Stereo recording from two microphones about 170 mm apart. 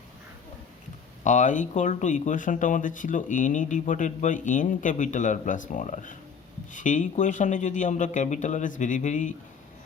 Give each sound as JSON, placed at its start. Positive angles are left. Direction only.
{"t": 1.2, "sound": "speech", "side_deg": 45}